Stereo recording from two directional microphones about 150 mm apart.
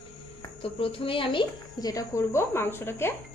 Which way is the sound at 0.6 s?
35° left (ahead or behind).